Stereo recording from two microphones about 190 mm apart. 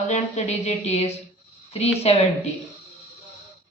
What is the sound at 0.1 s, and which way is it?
Speech, 35° left (ahead or behind).